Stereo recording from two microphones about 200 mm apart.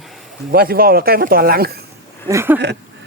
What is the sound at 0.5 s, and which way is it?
Speech, 50° right (ahead or behind).